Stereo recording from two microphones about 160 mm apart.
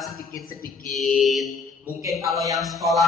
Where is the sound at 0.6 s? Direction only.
60° left (ahead or behind).